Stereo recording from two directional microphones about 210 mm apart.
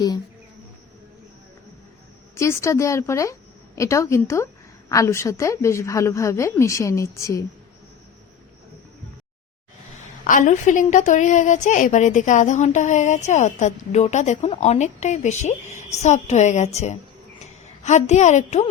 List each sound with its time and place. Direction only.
2.3 s a woman's voice: 15° left (ahead or behind)
10.2 s a woman's voice: 40° left (ahead or behind)